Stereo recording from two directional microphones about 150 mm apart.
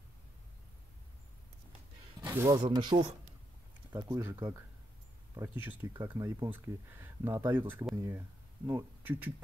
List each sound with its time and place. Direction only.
2.2 s speech: 20° right (ahead or behind)
3.9 s speech: 15° right (ahead or behind)
7.9 s speech: 20° right (ahead or behind)